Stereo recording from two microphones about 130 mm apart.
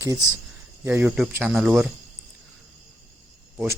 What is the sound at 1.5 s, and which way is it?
Speech, 5° right (ahead or behind).